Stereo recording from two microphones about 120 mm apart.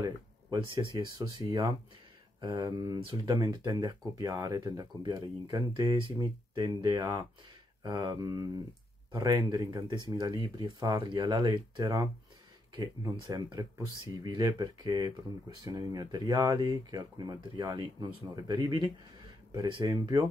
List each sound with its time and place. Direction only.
0.0 s speech: 40° right (ahead or behind)
2.6 s speech: 40° right (ahead or behind)